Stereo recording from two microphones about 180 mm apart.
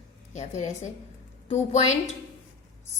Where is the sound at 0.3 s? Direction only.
40° left (ahead or behind).